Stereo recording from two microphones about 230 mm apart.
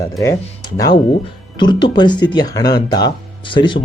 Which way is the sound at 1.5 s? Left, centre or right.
Centre.